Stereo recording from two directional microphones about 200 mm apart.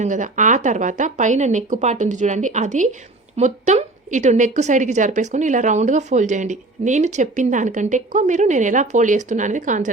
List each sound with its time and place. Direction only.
0.0 s a woman's voice: 40° right (ahead or behind)